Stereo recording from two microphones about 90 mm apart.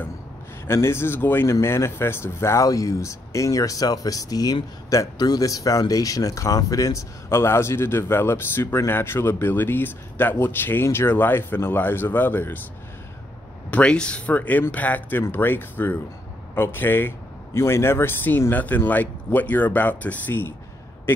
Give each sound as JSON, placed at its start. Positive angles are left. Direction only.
{"t": 0.7, "sound": "speech", "side_deg": 30}
{"t": 13.7, "sound": "speech", "side_deg": 10}